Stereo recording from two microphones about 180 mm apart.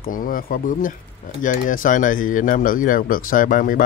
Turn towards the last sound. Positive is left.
turn(degrees=50)  # may be behind; listen again after turning